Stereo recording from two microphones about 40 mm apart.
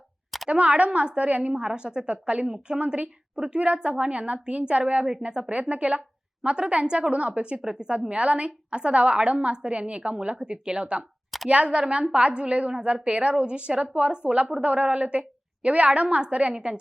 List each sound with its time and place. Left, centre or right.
0.4 s a woman's voice: right